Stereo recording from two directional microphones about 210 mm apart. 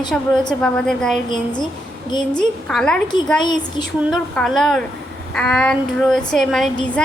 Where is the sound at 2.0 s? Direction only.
20° left (ahead or behind).